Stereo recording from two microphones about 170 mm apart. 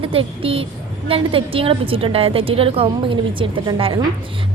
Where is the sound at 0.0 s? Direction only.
35° right (ahead or behind).